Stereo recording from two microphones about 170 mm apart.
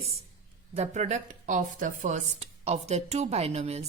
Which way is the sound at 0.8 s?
45° right (ahead or behind).